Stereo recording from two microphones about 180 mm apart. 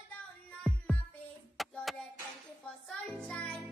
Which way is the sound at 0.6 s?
5° left (ahead or behind).